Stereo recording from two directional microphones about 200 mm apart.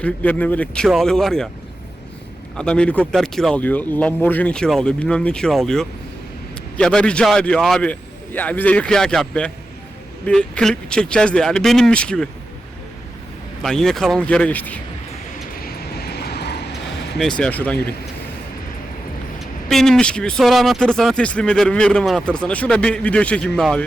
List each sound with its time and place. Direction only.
0.0 s speech: 5° left (ahead or behind)
2.6 s speech: 5° left (ahead or behind)
13.6 s speech: centre (ahead or behind)
15.5 s vehicle: 50° left (ahead or behind)
17.2 s speech: 5° left (ahead or behind)
19.6 s speech: centre (ahead or behind)